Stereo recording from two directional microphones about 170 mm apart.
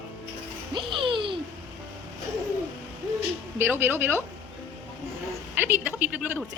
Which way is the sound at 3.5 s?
15° right (ahead or behind).